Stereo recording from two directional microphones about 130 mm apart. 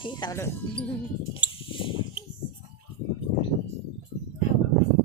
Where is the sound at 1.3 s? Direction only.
45° left (ahead or behind).